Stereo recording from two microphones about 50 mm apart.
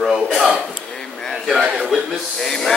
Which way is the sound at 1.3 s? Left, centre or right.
Centre.